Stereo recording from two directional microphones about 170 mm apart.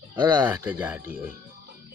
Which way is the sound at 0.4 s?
10° right (ahead or behind).